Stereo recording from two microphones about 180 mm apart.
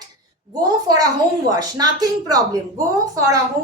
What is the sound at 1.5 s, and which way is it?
A woman's voice, 20° right (ahead or behind).